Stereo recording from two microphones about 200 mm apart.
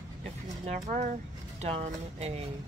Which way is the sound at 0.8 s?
40° right (ahead or behind).